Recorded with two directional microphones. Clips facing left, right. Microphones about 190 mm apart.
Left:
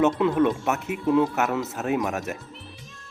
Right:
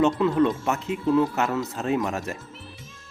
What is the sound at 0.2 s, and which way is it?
Speech, 10° left (ahead or behind).